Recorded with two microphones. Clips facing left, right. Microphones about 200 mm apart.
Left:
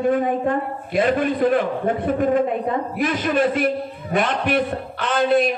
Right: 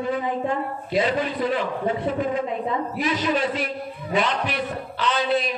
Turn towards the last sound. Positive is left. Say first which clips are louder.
# left 5 dB
turn(degrees=50)  # may be behind; listen again after turning